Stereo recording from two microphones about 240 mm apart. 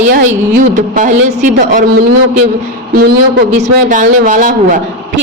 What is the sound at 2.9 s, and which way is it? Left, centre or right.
A man's voice, right.